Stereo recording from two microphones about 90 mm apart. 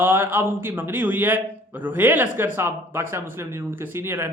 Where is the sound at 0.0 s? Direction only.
25° right (ahead or behind).